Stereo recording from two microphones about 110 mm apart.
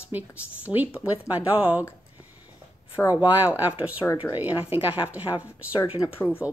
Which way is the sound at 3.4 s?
15° right (ahead or behind).